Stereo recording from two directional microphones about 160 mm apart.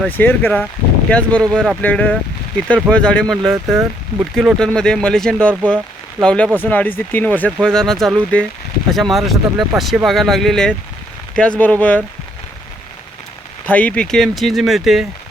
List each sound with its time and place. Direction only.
0.1 s speech: 10° left (ahead or behind)
3.7 s speech: 15° right (ahead or behind)
4.4 s speech: 5° left (ahead or behind)
13.7 s speech: 10° left (ahead or behind)